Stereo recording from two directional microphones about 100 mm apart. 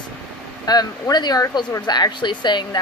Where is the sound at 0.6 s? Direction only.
40° left (ahead or behind).